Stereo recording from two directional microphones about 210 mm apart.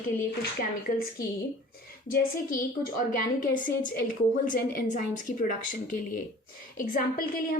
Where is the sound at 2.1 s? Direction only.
45° left (ahead or behind).